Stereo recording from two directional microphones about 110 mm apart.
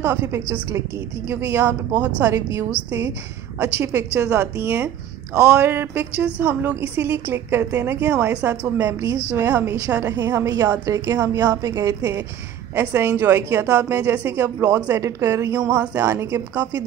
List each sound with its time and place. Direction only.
0.0 s a woman's voice: 20° right (ahead or behind)
3.5 s a woman's voice: 25° right (ahead or behind)